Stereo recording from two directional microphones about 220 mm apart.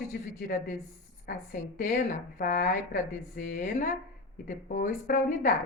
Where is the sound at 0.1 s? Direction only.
40° left (ahead or behind).